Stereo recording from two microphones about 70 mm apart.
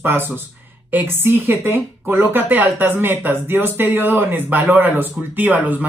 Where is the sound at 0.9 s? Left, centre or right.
Right.